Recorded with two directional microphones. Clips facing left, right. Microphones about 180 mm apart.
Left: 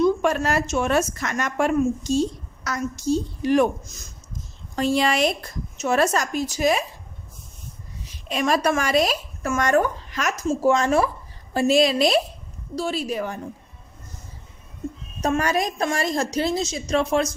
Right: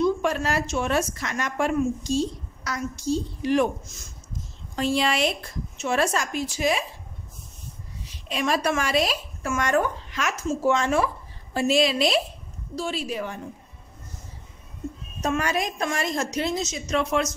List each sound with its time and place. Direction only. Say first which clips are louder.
0.0 s a woman's voice: left 3 dB; 50° left (ahead or behind)
8.3 s a woman's voice: left 3 dB; 45° left (ahead or behind)
15.2 s a woman's voice: left 3 dB; 40° left (ahead or behind)